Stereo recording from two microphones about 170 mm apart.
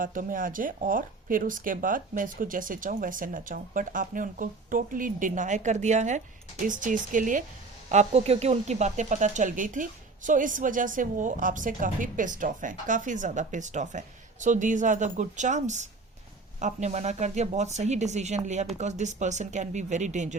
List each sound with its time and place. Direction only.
0.0 s speech: 55° right (ahead or behind)
7.9 s speech: 40° right (ahead or behind)